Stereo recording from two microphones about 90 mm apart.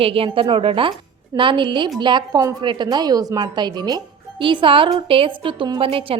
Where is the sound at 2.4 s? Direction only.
40° right (ahead or behind).